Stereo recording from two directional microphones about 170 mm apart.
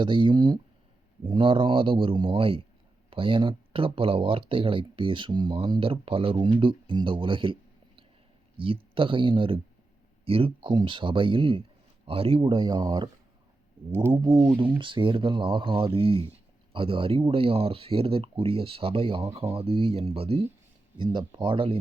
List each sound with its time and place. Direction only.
0.0 s speech: 30° right (ahead or behind)
13.9 s speech: 15° right (ahead or behind)
14.2 s speech: 25° right (ahead or behind)